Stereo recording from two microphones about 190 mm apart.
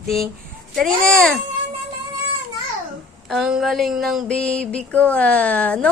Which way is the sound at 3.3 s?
5° right (ahead or behind).